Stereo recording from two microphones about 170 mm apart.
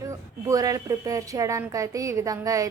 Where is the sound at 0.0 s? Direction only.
20° right (ahead or behind).